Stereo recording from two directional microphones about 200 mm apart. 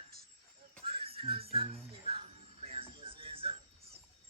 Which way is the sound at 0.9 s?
30° right (ahead or behind).